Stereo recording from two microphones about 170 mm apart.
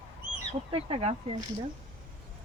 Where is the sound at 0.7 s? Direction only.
35° right (ahead or behind).